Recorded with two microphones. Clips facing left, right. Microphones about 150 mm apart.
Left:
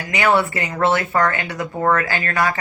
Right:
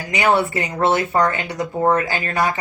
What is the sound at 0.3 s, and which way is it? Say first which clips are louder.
Speech: even; 20° right (ahead or behind).